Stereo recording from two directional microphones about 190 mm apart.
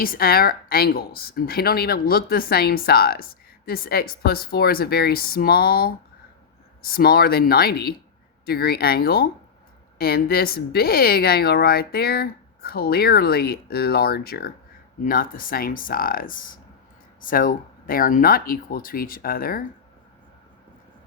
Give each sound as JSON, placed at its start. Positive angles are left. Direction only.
{"t": 0.0, "sound": "a woman's voice", "side_deg": 50}